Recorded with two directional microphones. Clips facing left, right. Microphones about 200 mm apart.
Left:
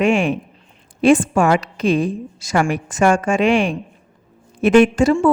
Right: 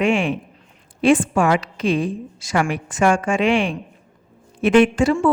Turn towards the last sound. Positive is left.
turn(degrees=40)  # may be behind; listen again after turning